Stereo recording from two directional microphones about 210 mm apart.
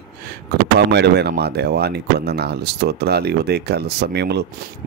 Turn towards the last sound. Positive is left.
turn(degrees=-50)  # may be behind; listen again after turning